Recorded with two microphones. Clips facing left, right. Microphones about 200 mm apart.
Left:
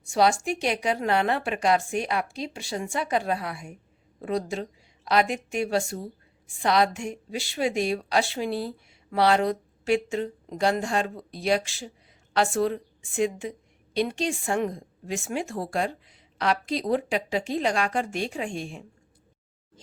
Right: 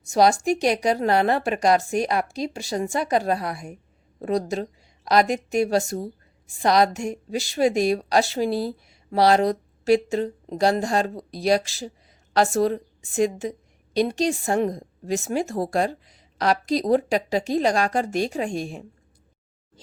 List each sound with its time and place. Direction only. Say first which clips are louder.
0.1 s a woman's voice: right 4 dB; 40° right (ahead or behind)